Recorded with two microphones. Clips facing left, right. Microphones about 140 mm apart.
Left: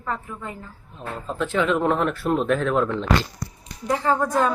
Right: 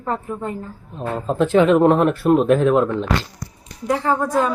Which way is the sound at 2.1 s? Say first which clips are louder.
Right 7 dB; 35° right (ahead or behind).